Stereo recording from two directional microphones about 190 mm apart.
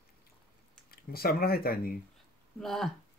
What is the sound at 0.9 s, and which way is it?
Speech, 55° left (ahead or behind).